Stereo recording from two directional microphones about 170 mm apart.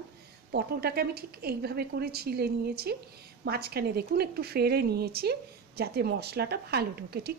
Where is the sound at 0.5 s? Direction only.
70° right (ahead or behind).